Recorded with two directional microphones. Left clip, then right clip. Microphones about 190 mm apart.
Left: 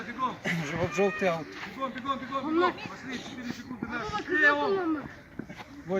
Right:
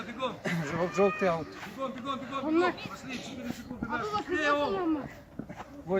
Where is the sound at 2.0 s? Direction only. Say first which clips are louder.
Left 2 dB; 55° right (ahead or behind).